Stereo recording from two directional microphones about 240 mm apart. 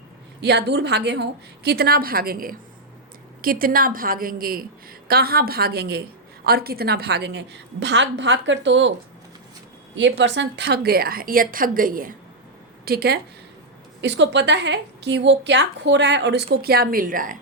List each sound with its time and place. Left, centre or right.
0.4 s a woman's voice: right
9.9 s a woman's voice: right